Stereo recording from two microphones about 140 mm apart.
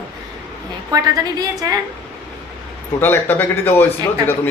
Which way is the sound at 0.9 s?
25° right (ahead or behind).